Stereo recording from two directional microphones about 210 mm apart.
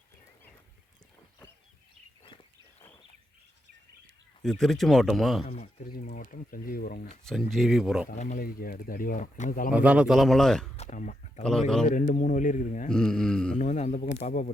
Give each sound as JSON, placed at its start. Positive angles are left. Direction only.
{"t": 4.4, "sound": "speech", "side_deg": 0}
{"t": 5.5, "sound": "speech", "side_deg": 40}
{"t": 7.3, "sound": "speech", "side_deg": 0}
{"t": 8.1, "sound": "speech", "side_deg": 35}
{"t": 9.7, "sound": "speech", "side_deg": -5}
{"t": 10.8, "sound": "speech", "side_deg": 35}
{"t": 11.4, "sound": "speech", "side_deg": 5}
{"t": 11.9, "sound": "speech", "side_deg": 35}
{"t": 12.9, "sound": "speech", "side_deg": 5}
{"t": 13.6, "sound": "speech", "side_deg": 35}